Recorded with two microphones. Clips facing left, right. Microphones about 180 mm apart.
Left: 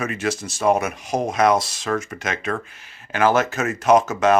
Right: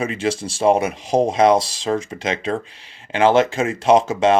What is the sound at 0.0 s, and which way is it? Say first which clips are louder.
Speech: right 3 dB; 30° right (ahead or behind).